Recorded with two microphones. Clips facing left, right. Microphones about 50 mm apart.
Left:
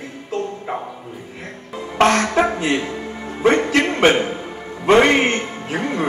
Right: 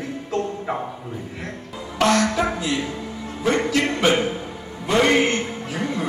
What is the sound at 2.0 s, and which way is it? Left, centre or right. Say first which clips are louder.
A man's voice: left 4 dB; left.